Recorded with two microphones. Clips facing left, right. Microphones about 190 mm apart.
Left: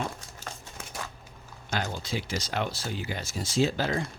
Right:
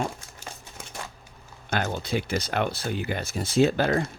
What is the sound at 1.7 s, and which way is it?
Speech, 60° right (ahead or behind).